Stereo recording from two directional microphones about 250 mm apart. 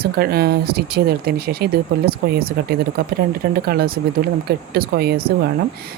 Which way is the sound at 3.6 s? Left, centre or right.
Right.